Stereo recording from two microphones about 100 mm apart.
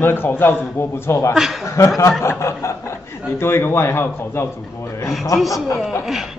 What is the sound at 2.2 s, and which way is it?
Speech, 30° left (ahead or behind).